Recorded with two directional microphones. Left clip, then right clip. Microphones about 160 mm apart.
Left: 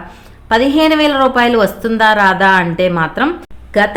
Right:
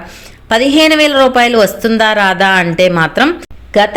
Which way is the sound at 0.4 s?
10° right (ahead or behind).